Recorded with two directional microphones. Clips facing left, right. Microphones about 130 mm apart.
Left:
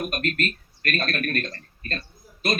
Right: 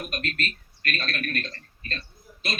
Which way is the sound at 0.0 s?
50° left (ahead or behind).